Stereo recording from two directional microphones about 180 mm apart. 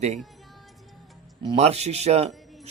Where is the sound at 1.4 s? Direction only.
30° right (ahead or behind).